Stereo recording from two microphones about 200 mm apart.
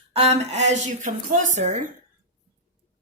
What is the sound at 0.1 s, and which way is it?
A woman's voice, 30° right (ahead or behind).